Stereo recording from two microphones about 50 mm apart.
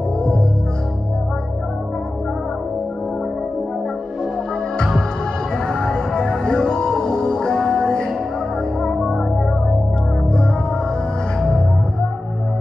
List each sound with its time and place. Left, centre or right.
5.7 s music: centre
8.8 s music: centre